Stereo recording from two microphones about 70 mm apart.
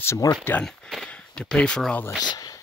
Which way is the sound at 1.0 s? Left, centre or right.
Centre.